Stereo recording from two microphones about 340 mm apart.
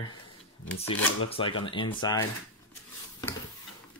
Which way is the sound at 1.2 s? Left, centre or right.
Centre.